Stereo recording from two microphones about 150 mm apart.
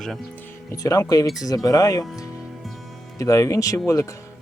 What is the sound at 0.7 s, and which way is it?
Speech, 20° left (ahead or behind).